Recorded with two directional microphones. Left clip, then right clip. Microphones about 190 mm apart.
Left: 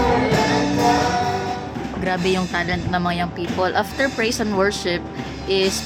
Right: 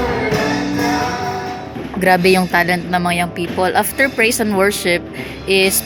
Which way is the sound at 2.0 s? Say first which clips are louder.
Right 9 dB; 25° right (ahead or behind).